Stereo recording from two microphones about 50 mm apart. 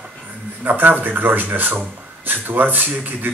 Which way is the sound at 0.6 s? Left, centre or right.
Right.